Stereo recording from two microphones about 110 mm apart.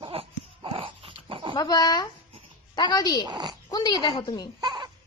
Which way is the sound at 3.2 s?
40° right (ahead or behind).